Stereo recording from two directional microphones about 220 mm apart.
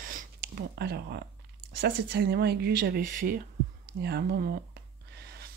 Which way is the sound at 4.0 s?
45° right (ahead or behind).